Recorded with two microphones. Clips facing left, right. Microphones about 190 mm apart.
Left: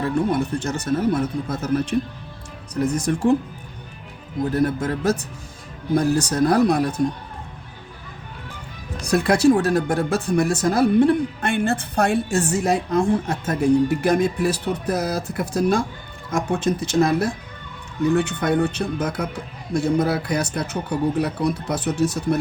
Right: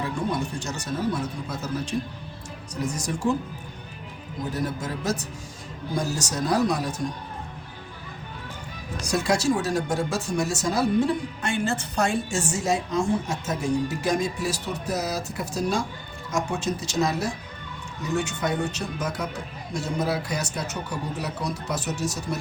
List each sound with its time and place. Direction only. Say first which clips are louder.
0.0 s speech: left 6 dB; 55° left (ahead or behind)
4.5 s speech: left 8 dB; 55° left (ahead or behind)
9.0 s speech: left 6 dB; 60° left (ahead or behind)